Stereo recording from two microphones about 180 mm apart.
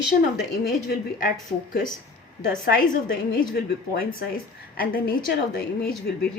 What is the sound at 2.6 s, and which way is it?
A woman's voice, 55° left (ahead or behind).